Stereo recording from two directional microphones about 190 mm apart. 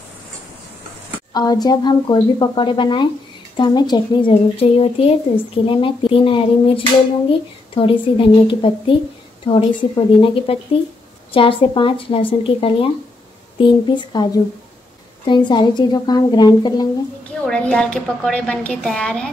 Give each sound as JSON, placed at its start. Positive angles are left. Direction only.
{"t": 1.3, "sound": "speech", "side_deg": 20}
{"t": 10.2, "sound": "speech", "side_deg": 30}
{"t": 17.5, "sound": "a woman's voice", "side_deg": 5}